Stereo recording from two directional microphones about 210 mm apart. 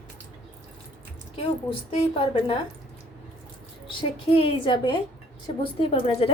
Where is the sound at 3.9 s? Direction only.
25° left (ahead or behind).